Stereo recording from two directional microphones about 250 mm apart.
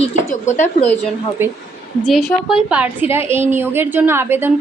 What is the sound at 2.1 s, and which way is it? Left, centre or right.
A woman's voice, centre.